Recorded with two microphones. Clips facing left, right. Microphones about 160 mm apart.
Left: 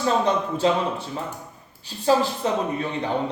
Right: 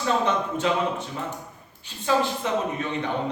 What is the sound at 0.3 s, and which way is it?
A man's voice, 35° left (ahead or behind).